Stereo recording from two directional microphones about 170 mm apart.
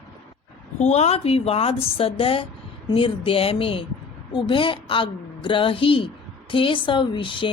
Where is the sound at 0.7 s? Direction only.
40° left (ahead or behind).